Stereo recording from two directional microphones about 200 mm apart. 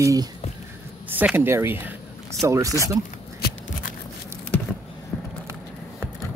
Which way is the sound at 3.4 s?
40° left (ahead or behind).